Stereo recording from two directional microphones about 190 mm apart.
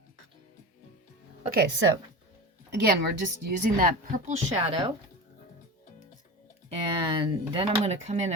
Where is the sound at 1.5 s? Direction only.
60° right (ahead or behind).